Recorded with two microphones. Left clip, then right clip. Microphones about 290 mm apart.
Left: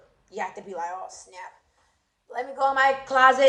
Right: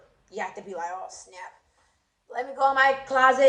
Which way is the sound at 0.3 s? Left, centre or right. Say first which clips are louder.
Left 1 dB; centre.